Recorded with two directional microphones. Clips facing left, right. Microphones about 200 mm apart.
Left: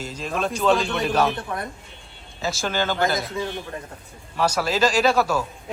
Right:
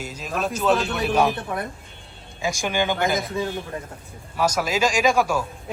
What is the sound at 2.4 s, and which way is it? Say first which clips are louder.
A man's voice: right 1 dB; 15° right (ahead or behind).